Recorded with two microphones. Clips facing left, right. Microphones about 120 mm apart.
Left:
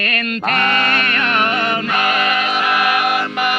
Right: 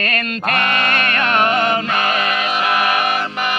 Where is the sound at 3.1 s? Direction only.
10° left (ahead or behind).